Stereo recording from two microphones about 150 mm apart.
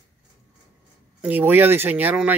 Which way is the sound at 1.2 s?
10° right (ahead or behind).